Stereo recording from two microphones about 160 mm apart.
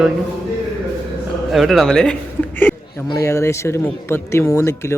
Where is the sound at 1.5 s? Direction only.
Centre (ahead or behind).